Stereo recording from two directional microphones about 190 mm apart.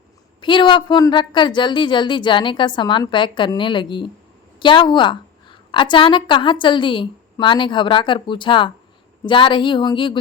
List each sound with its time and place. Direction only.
0.4 s a woman's voice: 25° left (ahead or behind)